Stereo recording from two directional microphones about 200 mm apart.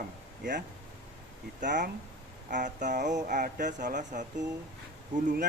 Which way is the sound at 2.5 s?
40° right (ahead or behind).